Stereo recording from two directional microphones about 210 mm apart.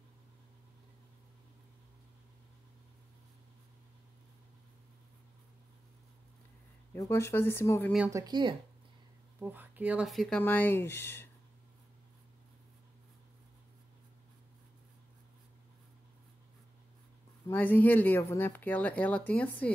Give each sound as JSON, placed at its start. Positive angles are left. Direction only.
{"t": 6.9, "sound": "speech", "side_deg": 10}
{"t": 8.1, "sound": "speech", "side_deg": -20}
{"t": 9.4, "sound": "speech", "side_deg": -10}
{"t": 17.5, "sound": "speech", "side_deg": 10}